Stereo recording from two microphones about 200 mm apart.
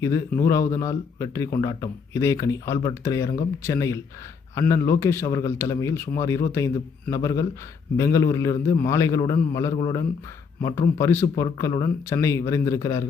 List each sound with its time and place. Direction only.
0.0 s speech: 15° left (ahead or behind)